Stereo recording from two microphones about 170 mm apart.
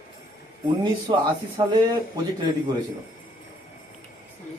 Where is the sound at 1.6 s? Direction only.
30° right (ahead or behind).